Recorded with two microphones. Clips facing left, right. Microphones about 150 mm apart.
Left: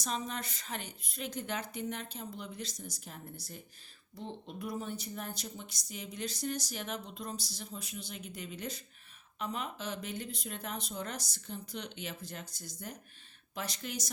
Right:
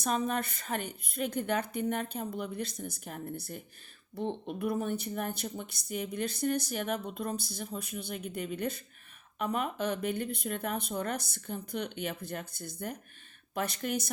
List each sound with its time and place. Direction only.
0.0 s speech: 55° right (ahead or behind)